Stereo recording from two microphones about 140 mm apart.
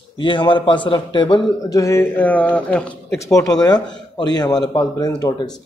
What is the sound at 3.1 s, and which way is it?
A man's voice, 25° left (ahead or behind).